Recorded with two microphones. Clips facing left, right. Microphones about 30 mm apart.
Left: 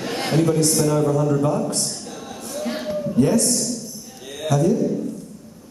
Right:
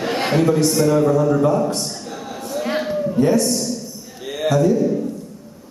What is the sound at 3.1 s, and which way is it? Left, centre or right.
A man's voice, centre.